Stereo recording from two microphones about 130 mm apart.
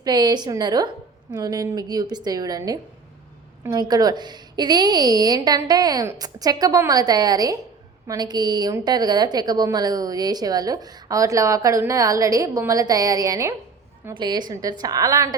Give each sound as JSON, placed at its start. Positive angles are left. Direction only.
{"t": 0.0, "sound": "a woman's voice", "side_deg": -30}